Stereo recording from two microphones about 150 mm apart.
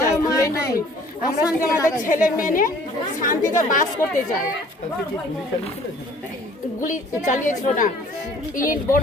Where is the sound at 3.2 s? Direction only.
60° left (ahead or behind).